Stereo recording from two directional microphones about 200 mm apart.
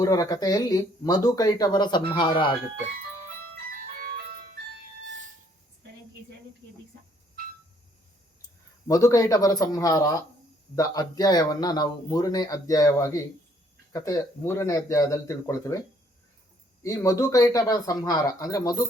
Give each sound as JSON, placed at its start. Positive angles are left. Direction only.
{"t": 0.0, "sound": "speech", "side_deg": 20}
{"t": 3.9, "sound": "ice cream truck", "side_deg": -50}
{"t": 8.9, "sound": "speech", "side_deg": 15}
{"t": 16.8, "sound": "speech", "side_deg": 15}